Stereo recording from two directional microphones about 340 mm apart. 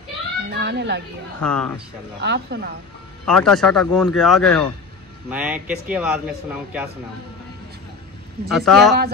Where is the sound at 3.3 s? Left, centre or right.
Centre.